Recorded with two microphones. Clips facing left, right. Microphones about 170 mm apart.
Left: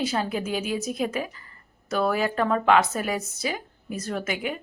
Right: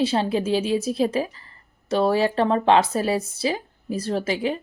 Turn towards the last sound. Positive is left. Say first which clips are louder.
# right 5 dB
turn(degrees=-30)  # may be behind; listen again after turning